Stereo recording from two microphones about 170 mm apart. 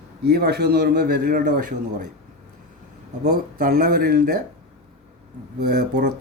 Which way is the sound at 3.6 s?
65° right (ahead or behind).